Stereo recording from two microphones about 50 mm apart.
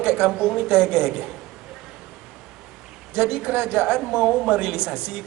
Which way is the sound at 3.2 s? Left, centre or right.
Right.